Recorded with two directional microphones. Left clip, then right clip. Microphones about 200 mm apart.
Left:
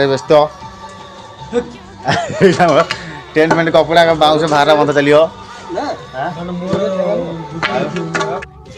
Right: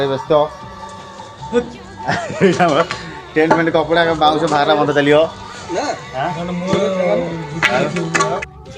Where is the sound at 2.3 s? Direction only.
30° left (ahead or behind).